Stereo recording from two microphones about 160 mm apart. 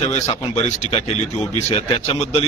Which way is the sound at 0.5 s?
45° left (ahead or behind).